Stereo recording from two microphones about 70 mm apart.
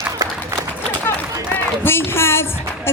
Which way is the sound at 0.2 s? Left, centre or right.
Right.